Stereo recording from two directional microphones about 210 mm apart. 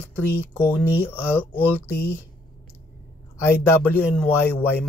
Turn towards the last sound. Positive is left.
turn(degrees=10)  # may be behind; listen again after turning